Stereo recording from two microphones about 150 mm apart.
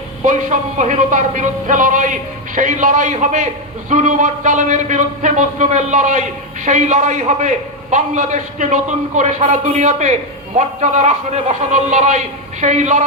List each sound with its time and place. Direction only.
0.2 s a man's voice: 55° right (ahead or behind)